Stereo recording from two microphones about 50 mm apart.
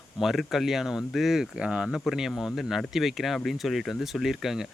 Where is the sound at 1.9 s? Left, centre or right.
Centre.